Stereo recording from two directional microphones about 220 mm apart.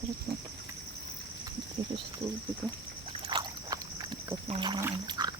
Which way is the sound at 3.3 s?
20° right (ahead or behind).